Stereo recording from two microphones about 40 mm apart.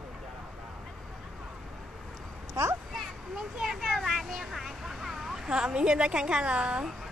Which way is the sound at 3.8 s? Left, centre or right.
Centre.